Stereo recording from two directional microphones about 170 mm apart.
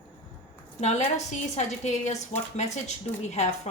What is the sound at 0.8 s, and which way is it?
A woman's voice, 40° left (ahead or behind).